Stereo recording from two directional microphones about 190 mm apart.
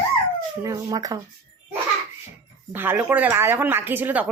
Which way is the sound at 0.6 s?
20° right (ahead or behind).